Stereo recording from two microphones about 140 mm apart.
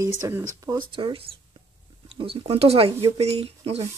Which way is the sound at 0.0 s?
20° right (ahead or behind).